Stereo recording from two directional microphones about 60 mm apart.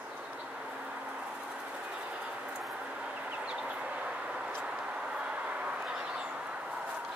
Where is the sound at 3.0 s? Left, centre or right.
Right.